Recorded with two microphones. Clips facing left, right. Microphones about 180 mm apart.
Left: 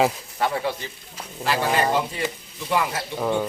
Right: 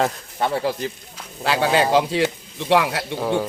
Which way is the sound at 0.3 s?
25° right (ahead or behind).